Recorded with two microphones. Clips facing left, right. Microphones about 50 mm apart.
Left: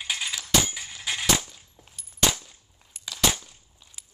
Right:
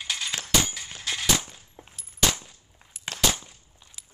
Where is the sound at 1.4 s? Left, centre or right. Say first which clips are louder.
Right 4 dB; right.